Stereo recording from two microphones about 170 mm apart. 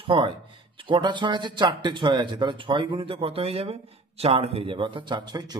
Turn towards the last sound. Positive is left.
turn(degrees=-25)  # may be behind; listen again after turning